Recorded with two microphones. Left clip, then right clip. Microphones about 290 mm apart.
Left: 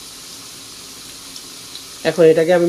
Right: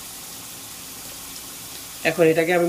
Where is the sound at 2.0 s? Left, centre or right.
Centre.